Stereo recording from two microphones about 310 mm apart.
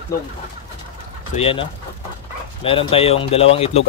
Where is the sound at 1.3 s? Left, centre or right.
Centre.